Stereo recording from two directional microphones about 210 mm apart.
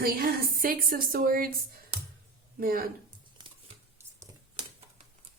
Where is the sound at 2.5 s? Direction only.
45° right (ahead or behind).